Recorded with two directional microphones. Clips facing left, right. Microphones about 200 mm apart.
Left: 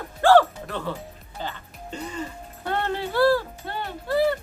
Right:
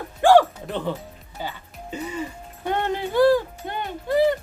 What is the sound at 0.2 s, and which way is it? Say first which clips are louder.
Music: right 1 dB; 15° right (ahead or behind).